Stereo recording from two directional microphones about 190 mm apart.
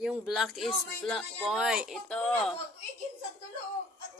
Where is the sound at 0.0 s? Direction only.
Centre (ahead or behind).